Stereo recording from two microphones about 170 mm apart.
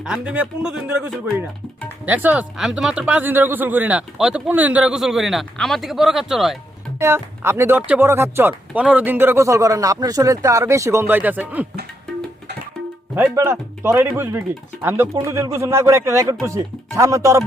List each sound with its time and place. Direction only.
0.0 s speech: 5° right (ahead or behind)
7.0 s speech: 15° right (ahead or behind)
13.1 s speech: 10° right (ahead or behind)